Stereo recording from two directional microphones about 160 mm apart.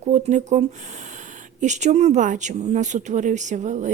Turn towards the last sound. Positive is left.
turn(degrees=-50)  # may be behind; listen again after turning